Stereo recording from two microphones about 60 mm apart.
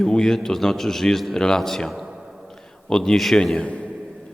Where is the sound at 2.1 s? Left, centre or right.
Centre.